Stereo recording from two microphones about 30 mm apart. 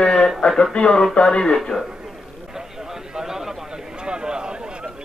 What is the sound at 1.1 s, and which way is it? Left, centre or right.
Speech, left.